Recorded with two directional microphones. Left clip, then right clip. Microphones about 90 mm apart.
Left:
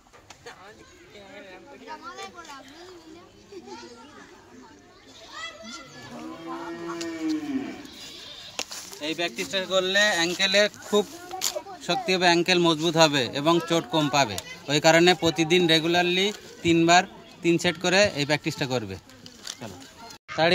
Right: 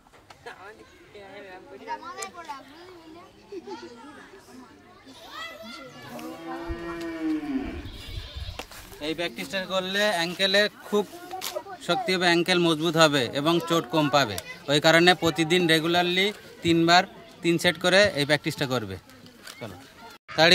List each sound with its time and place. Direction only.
1.3 s speech: 35° right (ahead or behind)
2.0 s speech: 25° right (ahead or behind)
6.5 s a sound: 15° right (ahead or behind)
7.2 s cattle: centre (ahead or behind)
9.0 s speech: 45° right (ahead or behind); by 18.9 s 30° right (ahead or behind)